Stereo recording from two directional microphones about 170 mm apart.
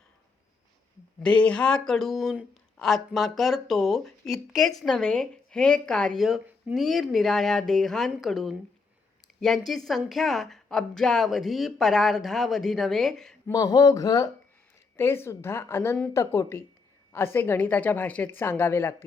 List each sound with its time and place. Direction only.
1.2 s a woman's voice: 5° left (ahead or behind)
13.5 s speech: 20° left (ahead or behind)